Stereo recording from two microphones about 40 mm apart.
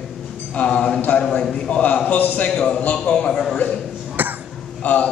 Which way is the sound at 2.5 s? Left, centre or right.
Centre.